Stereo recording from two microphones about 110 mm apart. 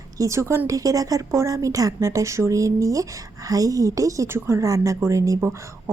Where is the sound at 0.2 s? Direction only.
25° right (ahead or behind).